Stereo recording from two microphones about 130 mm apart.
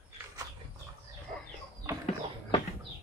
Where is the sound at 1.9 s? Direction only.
20° right (ahead or behind).